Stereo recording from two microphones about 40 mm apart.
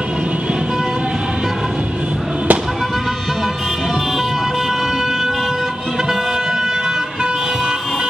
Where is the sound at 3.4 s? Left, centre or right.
Centre.